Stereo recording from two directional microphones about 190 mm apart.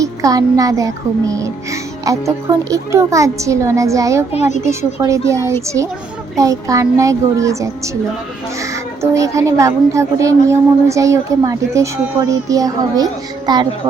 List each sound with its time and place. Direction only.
0.0 s music: 20° right (ahead or behind)
9.0 s music: 15° right (ahead or behind)
12.5 s a child's voice: 20° right (ahead or behind)